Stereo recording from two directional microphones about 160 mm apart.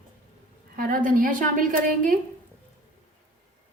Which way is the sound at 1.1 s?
55° right (ahead or behind).